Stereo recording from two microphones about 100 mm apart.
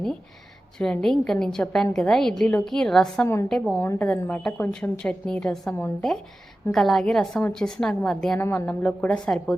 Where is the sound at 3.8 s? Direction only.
20° left (ahead or behind).